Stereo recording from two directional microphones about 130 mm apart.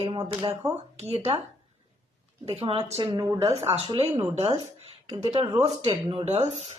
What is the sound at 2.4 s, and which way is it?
Speech, 50° right (ahead or behind).